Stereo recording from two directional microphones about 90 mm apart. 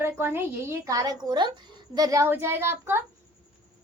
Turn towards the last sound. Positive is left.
turn(degrees=-25)  # may be behind; listen again after turning